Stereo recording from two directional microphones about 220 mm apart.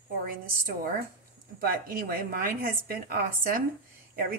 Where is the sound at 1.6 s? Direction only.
40° right (ahead or behind).